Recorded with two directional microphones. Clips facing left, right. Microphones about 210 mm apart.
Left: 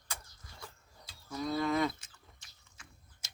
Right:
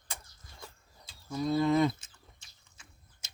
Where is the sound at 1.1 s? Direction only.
25° right (ahead or behind).